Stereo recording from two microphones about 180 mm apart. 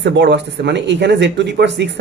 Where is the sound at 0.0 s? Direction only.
70° right (ahead or behind).